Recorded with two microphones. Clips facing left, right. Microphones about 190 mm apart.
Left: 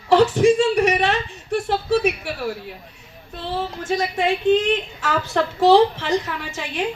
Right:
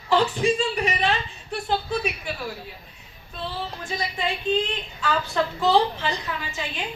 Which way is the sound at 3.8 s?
85° left.